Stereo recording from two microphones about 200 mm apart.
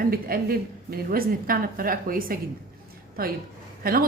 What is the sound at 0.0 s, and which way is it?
Speech, 45° right (ahead or behind).